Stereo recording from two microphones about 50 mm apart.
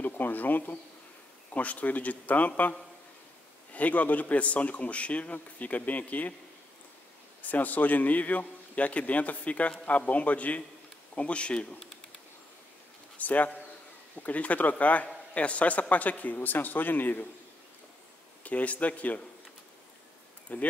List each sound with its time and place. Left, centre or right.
0.0 s a man's voice: left
3.7 s a man's voice: left
7.4 s a man's voice: left
13.2 s a man's voice: left
18.4 s a man's voice: left
20.5 s a man's voice: left